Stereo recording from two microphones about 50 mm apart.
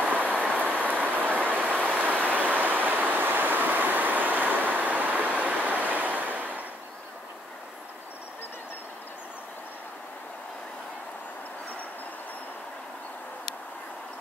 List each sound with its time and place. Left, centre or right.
0.1 s train: right
1.3 s vehicle: right